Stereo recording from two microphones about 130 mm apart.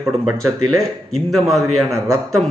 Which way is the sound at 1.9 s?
25° right (ahead or behind).